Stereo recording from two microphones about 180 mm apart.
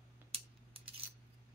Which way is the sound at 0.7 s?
30° right (ahead or behind).